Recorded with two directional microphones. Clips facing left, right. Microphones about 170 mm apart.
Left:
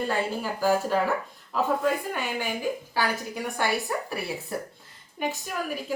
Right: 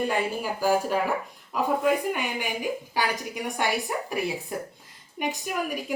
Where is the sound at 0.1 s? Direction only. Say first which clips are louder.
Right 1 dB; 15° right (ahead or behind).